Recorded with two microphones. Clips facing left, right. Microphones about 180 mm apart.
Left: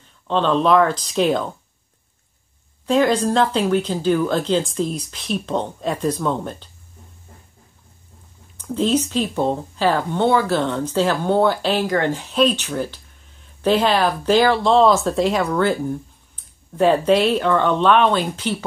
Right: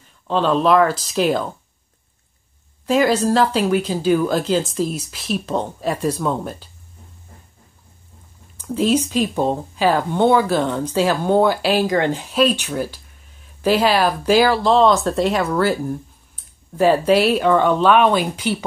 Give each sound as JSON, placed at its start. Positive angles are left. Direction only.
{"t": 0.3, "sound": "speech", "side_deg": -5}
{"t": 2.9, "sound": "speech", "side_deg": -5}
{"t": 8.5, "sound": "speech", "side_deg": -10}